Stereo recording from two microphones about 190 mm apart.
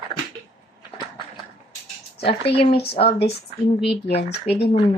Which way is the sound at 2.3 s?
30° left (ahead or behind).